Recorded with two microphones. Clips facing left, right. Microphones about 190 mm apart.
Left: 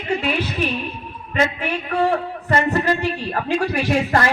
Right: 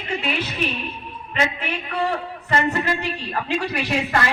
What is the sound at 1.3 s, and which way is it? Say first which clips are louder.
A man's voice: left 4 dB; 45° left (ahead or behind).